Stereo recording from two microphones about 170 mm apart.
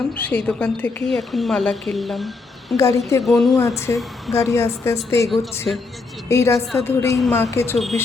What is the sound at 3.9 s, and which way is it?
A woman's voice, 15° left (ahead or behind).